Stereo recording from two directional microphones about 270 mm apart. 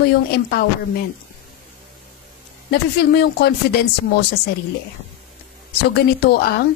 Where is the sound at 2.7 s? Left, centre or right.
Left.